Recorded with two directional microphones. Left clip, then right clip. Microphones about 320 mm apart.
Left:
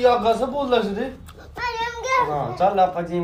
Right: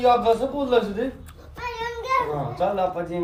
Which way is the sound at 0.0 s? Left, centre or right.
Left.